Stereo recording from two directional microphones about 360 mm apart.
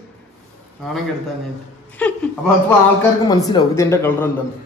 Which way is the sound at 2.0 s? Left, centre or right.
Centre.